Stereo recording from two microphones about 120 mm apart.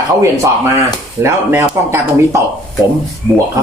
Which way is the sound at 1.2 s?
20° right (ahead or behind).